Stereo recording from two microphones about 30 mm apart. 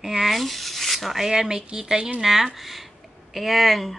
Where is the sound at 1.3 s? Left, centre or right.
Right.